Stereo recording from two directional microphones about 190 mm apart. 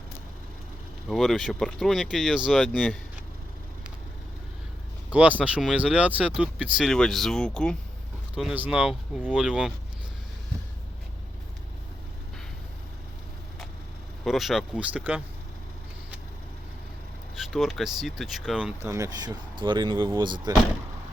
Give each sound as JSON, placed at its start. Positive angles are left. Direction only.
{"t": 1.0, "sound": "speech", "side_deg": 0}
{"t": 5.1, "sound": "speech", "side_deg": -5}
{"t": 14.3, "sound": "speech", "side_deg": 0}
{"t": 17.3, "sound": "speech", "side_deg": 0}
{"t": 18.8, "sound": "speech", "side_deg": -15}